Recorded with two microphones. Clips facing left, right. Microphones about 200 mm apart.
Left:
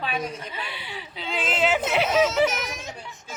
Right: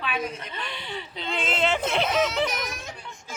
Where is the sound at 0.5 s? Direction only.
5° left (ahead or behind).